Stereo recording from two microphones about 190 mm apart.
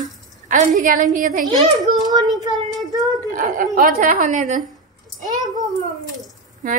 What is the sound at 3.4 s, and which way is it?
A woman's voice, 45° right (ahead or behind).